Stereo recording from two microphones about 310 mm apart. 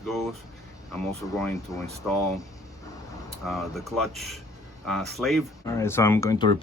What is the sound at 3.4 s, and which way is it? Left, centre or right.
Speech, centre.